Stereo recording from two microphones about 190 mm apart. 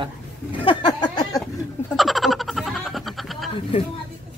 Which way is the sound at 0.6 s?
25° left (ahead or behind).